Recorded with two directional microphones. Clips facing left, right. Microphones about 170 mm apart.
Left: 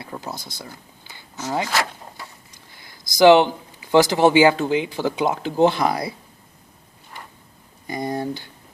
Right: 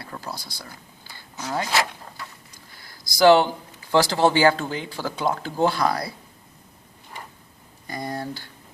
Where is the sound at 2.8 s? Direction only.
20° left (ahead or behind).